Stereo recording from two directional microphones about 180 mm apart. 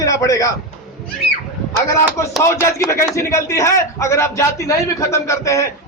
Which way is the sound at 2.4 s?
15° left (ahead or behind).